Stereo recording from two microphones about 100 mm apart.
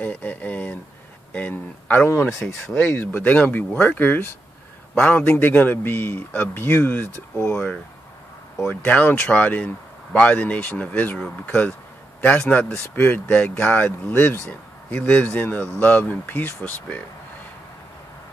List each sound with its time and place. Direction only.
0.0 s a sound: 15° left (ahead or behind)
1.3 s speech: 15° left (ahead or behind)
2.2 s speech: centre (ahead or behind)
2.6 s a man's voice: 25° left (ahead or behind)